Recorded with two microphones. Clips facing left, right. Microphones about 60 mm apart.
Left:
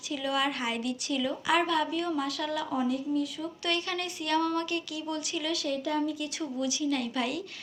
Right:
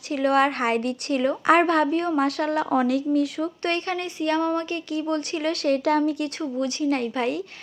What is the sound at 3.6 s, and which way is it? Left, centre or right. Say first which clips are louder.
Speech: right 3 dB; right.